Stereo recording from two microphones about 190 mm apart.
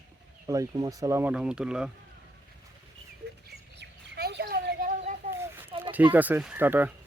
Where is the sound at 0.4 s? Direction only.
15° right (ahead or behind).